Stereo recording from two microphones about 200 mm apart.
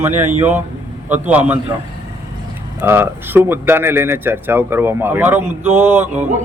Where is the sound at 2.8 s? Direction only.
10° right (ahead or behind).